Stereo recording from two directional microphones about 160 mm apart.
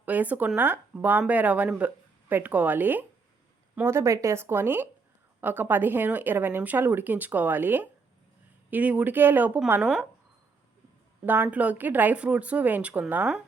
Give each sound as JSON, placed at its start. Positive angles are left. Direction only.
{"t": 0.0, "sound": "speech", "side_deg": -10}
{"t": 11.3, "sound": "speech", "side_deg": -10}